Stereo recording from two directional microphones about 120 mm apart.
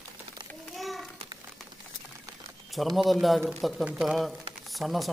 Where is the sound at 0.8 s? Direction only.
Centre (ahead or behind).